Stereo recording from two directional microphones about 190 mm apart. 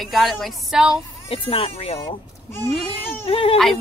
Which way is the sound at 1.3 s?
30° left (ahead or behind).